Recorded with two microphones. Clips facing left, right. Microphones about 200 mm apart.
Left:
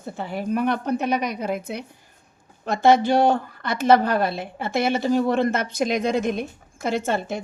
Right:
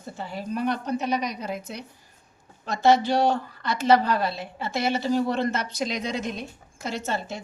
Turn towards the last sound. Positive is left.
turn(degrees=55)  # may be behind; listen again after turning